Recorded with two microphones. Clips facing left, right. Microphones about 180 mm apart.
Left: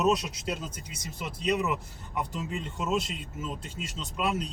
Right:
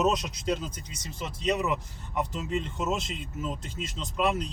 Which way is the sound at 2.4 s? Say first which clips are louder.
Right 3 dB; 5° left (ahead or behind).